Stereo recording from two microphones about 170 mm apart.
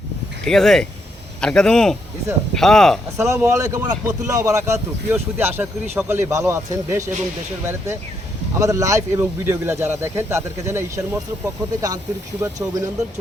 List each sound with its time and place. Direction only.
0.4 s speech: centre (ahead or behind)
3.4 s speech: 20° right (ahead or behind)